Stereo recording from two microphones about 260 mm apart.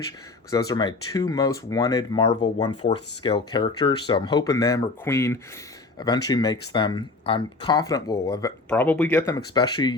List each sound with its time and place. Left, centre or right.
0.5 s speech: centre